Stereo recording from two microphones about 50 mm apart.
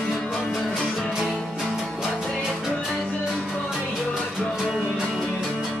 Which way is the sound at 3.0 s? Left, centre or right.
Centre.